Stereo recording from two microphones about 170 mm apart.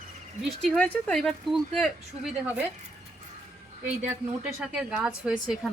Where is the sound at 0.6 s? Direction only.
5° left (ahead or behind).